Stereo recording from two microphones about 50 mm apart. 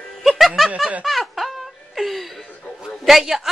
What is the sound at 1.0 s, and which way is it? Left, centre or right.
Laughter, centre.